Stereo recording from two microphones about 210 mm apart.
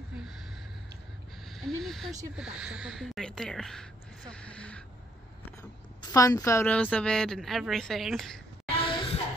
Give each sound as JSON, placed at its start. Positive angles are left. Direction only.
{"t": 1.5, "sound": "speech", "side_deg": 0}
{"t": 6.1, "sound": "a woman's voice", "side_deg": 15}
{"t": 8.6, "sound": "a sound", "side_deg": 25}